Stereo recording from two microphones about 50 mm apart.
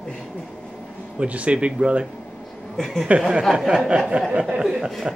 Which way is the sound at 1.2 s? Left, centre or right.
Right.